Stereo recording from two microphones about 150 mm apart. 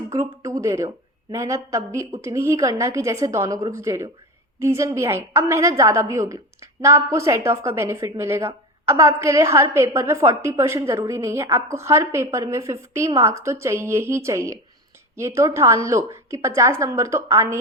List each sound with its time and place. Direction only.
0.1 s a woman's voice: 20° right (ahead or behind)